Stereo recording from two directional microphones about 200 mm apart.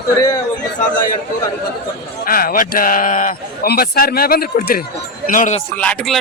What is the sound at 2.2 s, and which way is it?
A man's voice, 45° left (ahead or behind).